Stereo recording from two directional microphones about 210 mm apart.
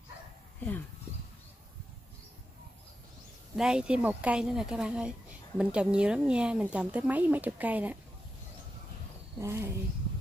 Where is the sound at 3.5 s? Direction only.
5° right (ahead or behind).